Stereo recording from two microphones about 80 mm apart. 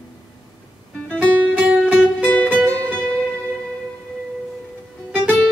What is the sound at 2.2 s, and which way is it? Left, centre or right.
Music, left.